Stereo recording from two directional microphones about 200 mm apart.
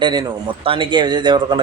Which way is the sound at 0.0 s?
20° right (ahead or behind).